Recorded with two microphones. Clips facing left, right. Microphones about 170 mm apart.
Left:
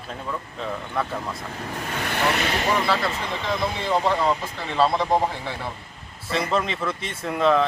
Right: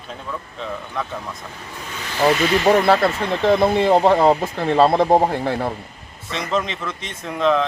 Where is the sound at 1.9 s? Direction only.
55° left (ahead or behind).